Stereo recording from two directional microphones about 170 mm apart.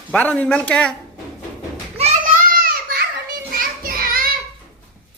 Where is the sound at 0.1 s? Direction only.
10° left (ahead or behind).